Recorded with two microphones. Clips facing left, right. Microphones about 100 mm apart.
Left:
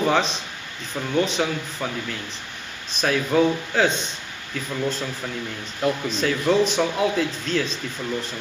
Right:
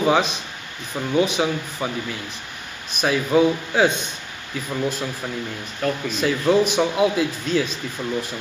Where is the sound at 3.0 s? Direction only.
10° right (ahead or behind).